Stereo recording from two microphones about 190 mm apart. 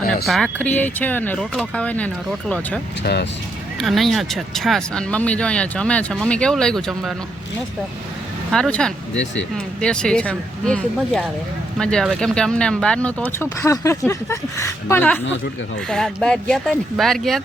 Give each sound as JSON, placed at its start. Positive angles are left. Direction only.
{"t": 0.3, "sound": "speech", "side_deg": 5}
{"t": 3.0, "sound": "speech", "side_deg": 60}
{"t": 3.8, "sound": "speech", "side_deg": 0}
{"t": 8.5, "sound": "speech", "side_deg": 5}